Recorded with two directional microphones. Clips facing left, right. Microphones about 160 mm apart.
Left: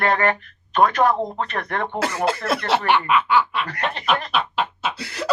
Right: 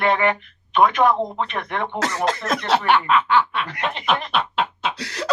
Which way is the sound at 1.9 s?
10° left (ahead or behind).